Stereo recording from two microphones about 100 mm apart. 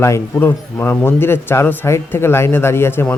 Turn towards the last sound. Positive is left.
turn(degrees=25)  # may be behind; listen again after turning